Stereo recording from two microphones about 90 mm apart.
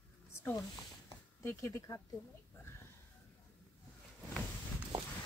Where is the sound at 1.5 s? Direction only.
30° left (ahead or behind).